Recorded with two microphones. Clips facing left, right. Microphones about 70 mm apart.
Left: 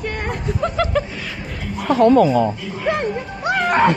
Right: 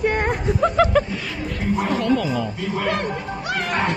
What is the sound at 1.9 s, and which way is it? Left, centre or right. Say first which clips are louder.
Speech: left 12 dB; left.